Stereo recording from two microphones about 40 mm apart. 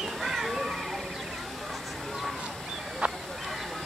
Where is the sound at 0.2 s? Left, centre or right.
Centre.